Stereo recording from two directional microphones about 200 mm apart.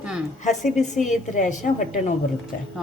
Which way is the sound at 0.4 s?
35° left (ahead or behind).